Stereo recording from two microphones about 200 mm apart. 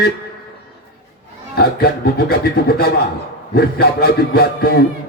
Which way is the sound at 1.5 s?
50° left (ahead or behind).